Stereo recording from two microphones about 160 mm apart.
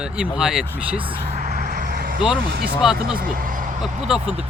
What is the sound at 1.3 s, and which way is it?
Vehicle, 50° right (ahead or behind).